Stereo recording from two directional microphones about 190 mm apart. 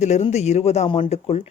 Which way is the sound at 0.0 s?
35° left (ahead or behind).